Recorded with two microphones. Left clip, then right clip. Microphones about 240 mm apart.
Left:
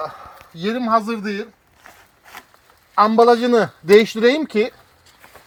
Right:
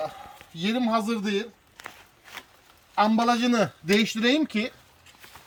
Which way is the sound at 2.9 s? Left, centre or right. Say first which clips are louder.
Left 10 dB; centre.